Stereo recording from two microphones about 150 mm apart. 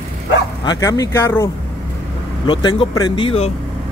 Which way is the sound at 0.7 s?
25° left (ahead or behind).